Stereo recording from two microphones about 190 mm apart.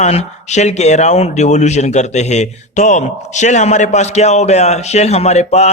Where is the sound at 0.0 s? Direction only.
35° left (ahead or behind).